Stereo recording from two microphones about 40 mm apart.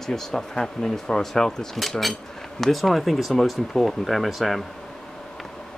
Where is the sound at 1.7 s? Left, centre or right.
Centre.